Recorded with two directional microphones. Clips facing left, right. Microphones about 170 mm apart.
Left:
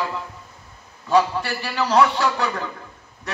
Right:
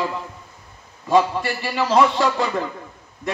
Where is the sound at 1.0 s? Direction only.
20° right (ahead or behind).